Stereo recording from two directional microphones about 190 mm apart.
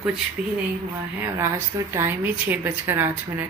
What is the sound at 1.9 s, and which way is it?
A woman's voice, 10° right (ahead or behind).